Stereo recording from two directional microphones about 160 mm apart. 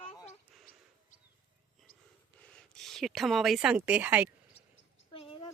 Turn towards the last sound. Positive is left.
turn(degrees=35)  # may be behind; listen again after turning